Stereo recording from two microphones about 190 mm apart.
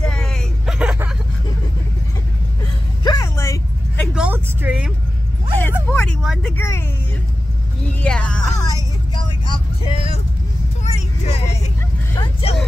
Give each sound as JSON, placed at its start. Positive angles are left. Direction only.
{"t": 0.0, "sound": "vehicle", "side_deg": 5}
{"t": 3.0, "sound": "vehicle", "side_deg": 20}
{"t": 4.1, "sound": "vehicle", "side_deg": -5}
{"t": 5.6, "sound": "speech", "side_deg": 10}
{"t": 8.0, "sound": "speech", "side_deg": 5}
{"t": 8.6, "sound": "vehicle", "side_deg": 20}
{"t": 12.2, "sound": "speech", "side_deg": 30}